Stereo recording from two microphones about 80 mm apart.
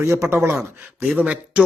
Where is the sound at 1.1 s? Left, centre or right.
Centre.